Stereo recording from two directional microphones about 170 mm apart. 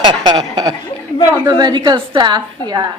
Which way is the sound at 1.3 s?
20° right (ahead or behind).